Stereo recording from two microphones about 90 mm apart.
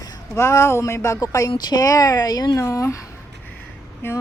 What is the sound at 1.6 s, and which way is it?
Speech, 50° left (ahead or behind).